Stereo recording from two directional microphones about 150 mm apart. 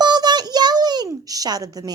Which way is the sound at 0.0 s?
30° right (ahead or behind).